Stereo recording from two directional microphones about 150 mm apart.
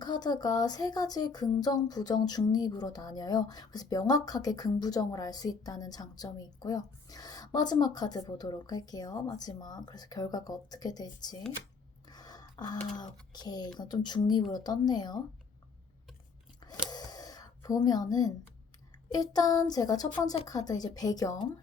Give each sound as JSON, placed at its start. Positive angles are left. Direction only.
{"t": 0.0, "sound": "speech", "side_deg": 30}
{"t": 12.1, "sound": "gasp", "side_deg": 25}
{"t": 13.0, "sound": "speech", "side_deg": 25}
{"t": 16.9, "sound": "a sound", "side_deg": 25}
{"t": 19.1, "sound": "speech", "side_deg": 25}